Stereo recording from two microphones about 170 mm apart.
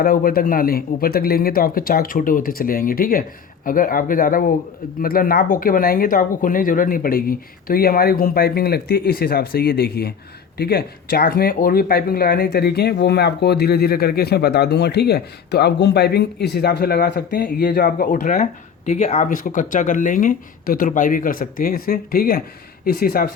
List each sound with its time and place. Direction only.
0.0 s speech: 55° left (ahead or behind)